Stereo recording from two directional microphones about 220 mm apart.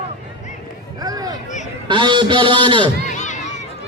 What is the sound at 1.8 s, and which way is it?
A man's voice, 20° right (ahead or behind).